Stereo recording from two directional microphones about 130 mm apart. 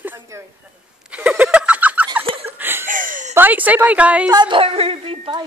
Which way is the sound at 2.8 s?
90° right.